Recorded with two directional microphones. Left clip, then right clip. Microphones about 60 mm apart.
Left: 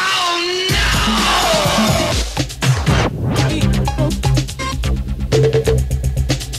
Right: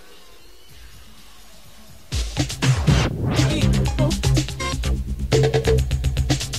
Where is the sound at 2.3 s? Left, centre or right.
Right.